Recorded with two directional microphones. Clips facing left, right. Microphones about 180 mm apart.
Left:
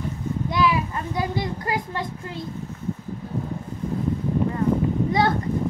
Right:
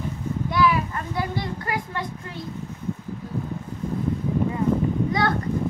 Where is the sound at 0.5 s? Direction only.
20° left (ahead or behind).